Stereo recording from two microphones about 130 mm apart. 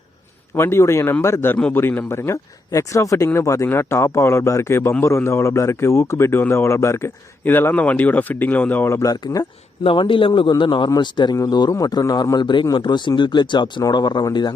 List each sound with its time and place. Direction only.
0.5 s speech: 20° left (ahead or behind)
9.8 s a man's voice: 40° left (ahead or behind)